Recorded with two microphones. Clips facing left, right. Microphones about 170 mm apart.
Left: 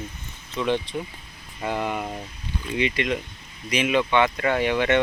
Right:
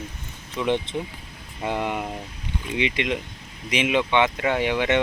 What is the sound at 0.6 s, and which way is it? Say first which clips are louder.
Speech: right 1 dB; 20° right (ahead or behind).